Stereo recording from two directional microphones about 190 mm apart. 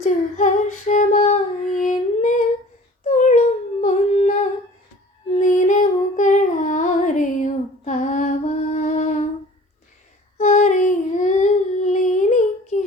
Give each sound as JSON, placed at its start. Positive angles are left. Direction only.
{"t": 0.0, "sound": "female singing", "side_deg": 40}
{"t": 3.1, "sound": "humming", "side_deg": 40}
{"t": 5.4, "sound": "female singing", "side_deg": 40}
{"t": 10.3, "sound": "a sound", "side_deg": 35}